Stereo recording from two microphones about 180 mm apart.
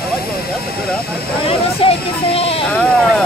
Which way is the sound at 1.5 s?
30° left (ahead or behind).